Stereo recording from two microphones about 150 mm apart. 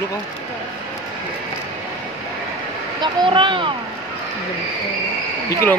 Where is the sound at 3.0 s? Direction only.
35° right (ahead or behind).